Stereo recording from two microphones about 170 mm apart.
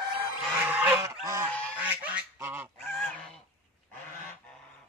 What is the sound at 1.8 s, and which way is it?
Duck, 10° right (ahead or behind).